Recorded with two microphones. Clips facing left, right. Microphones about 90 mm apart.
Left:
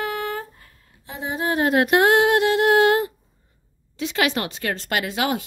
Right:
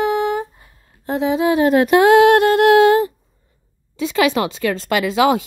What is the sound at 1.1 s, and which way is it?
Music, 45° right (ahead or behind).